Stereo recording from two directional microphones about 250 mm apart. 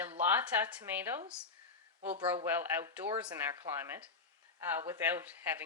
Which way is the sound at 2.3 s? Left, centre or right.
Centre.